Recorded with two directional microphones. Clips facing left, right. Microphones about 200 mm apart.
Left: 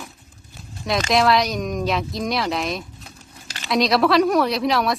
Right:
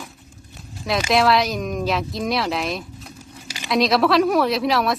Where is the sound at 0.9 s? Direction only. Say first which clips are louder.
Even; centre (ahead or behind).